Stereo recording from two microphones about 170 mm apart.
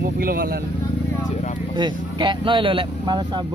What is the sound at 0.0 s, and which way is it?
Speech, 65° right (ahead or behind).